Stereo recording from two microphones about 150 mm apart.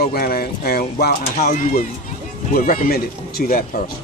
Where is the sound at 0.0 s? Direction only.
85° left.